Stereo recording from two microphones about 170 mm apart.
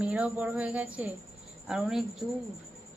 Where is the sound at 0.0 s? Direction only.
5° right (ahead or behind).